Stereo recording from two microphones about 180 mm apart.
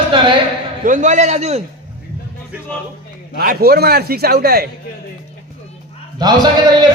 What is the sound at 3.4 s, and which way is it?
A man's voice, 55° right (ahead or behind).